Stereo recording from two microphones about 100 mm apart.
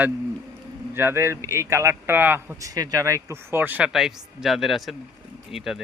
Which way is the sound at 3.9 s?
5° right (ahead or behind).